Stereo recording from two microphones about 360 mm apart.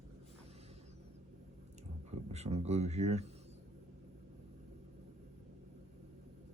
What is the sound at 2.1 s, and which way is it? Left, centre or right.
Speech, centre.